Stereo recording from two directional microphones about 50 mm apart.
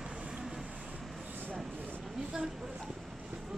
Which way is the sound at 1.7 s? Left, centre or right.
Right.